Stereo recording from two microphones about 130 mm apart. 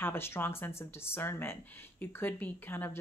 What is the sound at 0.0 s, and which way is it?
Speech, 20° left (ahead or behind).